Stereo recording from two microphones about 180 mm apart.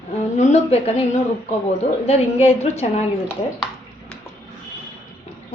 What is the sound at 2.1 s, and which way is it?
Speech, 35° left (ahead or behind).